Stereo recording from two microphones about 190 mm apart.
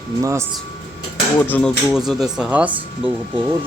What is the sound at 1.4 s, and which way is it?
Speech, 10° left (ahead or behind).